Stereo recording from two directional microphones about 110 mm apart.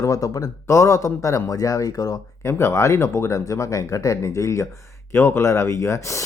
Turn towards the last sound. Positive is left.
turn(degrees=25)  # may be behind; listen again after turning